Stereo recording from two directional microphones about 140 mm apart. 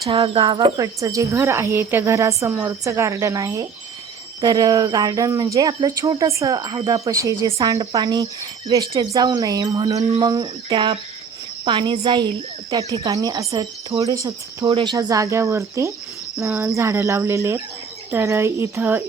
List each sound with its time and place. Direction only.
0.1 s speech: 35° right (ahead or behind)
0.8 s a woman's voice: 25° right (ahead or behind)